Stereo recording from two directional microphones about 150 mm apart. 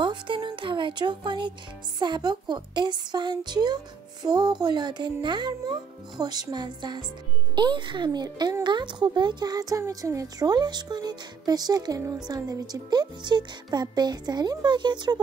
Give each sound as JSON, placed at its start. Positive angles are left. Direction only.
{"t": 0.0, "sound": "speech", "side_deg": -30}